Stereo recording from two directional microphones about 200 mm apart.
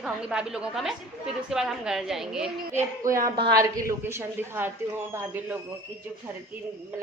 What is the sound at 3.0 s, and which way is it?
Speech, 15° right (ahead or behind).